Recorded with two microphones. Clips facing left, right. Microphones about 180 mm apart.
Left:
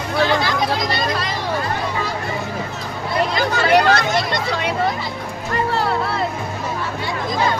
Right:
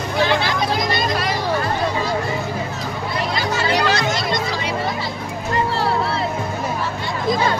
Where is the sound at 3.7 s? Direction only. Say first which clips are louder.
Left 7 dB; 60° left (ahead or behind).